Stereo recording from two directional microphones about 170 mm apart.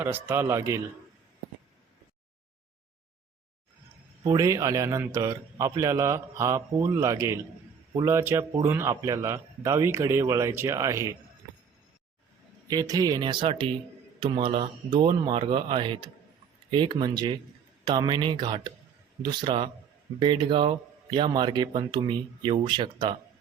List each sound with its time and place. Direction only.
0.0 s a man's voice: 15° right (ahead or behind)
4.2 s a man's voice: 25° right (ahead or behind)
12.7 s speech: 20° right (ahead or behind)